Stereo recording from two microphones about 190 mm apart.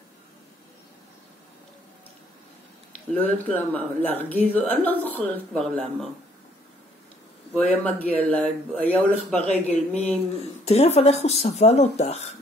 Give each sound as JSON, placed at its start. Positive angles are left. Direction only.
{"t": 3.2, "sound": "a woman's voice", "side_deg": 10}
{"t": 7.5, "sound": "a woman's voice", "side_deg": 10}
{"t": 10.6, "sound": "speech", "side_deg": 35}